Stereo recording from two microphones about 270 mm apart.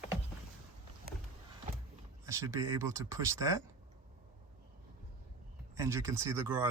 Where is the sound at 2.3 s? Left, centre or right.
Centre.